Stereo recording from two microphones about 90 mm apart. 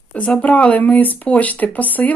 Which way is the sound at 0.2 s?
15° left (ahead or behind).